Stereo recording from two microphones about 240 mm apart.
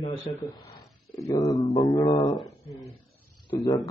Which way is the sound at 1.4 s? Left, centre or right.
Centre.